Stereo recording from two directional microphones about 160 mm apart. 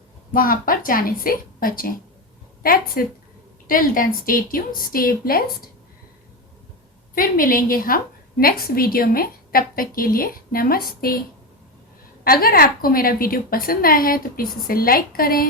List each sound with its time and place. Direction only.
0.3 s a woman's voice: 60° left (ahead or behind)
7.2 s a woman's voice: 60° left (ahead or behind)
12.2 s a woman's voice: 65° left (ahead or behind)